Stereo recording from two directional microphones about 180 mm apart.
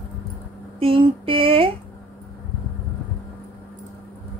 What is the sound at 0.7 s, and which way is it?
Speech, 30° right (ahead or behind).